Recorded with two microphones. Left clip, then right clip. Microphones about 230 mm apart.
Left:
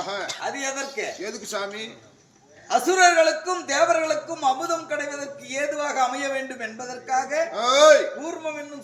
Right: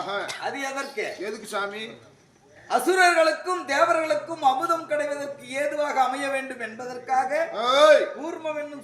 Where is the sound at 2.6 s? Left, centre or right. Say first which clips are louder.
Left 2 dB; centre.